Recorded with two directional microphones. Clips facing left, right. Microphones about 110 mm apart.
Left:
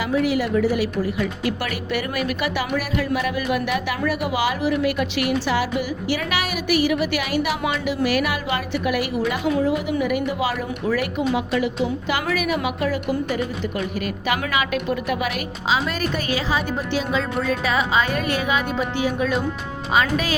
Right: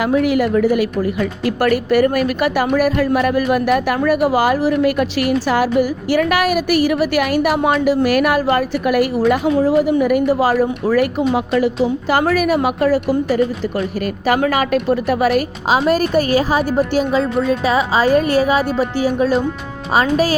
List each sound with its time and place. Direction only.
0.0 s a woman's voice: 55° right (ahead or behind); by 20.3 s 35° right (ahead or behind)